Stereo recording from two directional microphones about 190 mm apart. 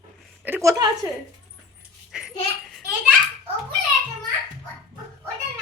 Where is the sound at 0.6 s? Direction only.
20° right (ahead or behind).